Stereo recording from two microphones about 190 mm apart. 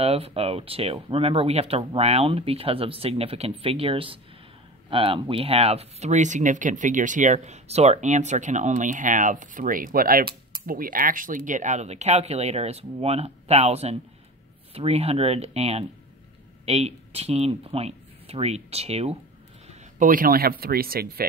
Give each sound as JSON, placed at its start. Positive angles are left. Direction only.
{"t": 0.0, "sound": "speech", "side_deg": -30}
{"t": 19.7, "sound": "speech", "side_deg": -45}